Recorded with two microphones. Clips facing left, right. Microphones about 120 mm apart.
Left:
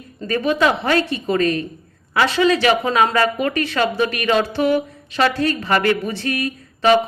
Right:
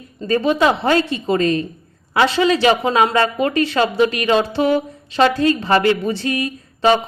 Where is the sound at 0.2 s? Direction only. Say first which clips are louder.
Right 2 dB; 25° right (ahead or behind).